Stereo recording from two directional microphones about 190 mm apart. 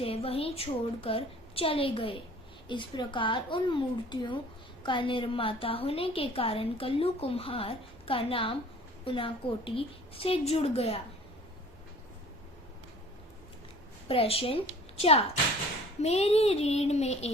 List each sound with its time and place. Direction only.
0.0 s a woman's voice: 30° left (ahead or behind)
14.1 s a woman's voice: 30° left (ahead or behind)